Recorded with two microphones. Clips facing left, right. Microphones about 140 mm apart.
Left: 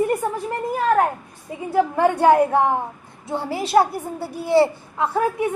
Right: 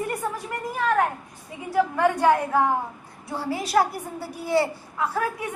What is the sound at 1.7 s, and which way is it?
A woman's voice, 30° left (ahead or behind).